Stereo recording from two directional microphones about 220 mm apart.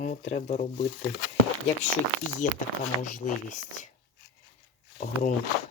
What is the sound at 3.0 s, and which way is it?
Speech, 35° left (ahead or behind).